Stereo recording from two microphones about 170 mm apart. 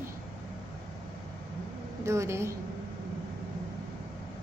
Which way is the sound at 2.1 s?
15° right (ahead or behind).